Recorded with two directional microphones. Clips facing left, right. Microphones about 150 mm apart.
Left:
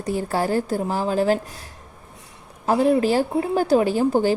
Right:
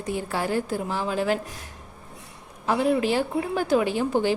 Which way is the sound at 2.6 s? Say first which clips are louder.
Left 4 dB; 40° left (ahead or behind).